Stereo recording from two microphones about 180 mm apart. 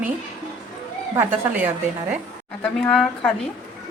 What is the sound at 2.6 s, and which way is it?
Speech, 5° left (ahead or behind).